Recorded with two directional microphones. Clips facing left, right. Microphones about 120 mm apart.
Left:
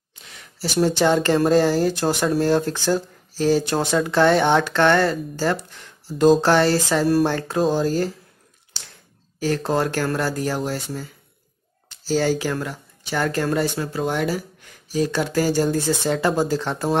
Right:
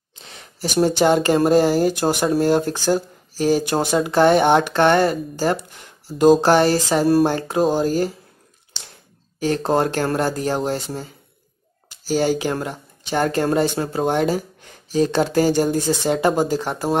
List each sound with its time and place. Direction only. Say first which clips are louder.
0.2 s a sound: right 3 dB; 30° right (ahead or behind)
0.6 s speech: right 2 dB; 15° right (ahead or behind)
9.4 s speech: right 2 dB; 20° right (ahead or behind)
12.0 s speech: right 1 dB; 15° right (ahead or behind)